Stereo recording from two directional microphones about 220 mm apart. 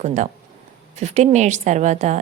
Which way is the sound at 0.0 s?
35° right (ahead or behind).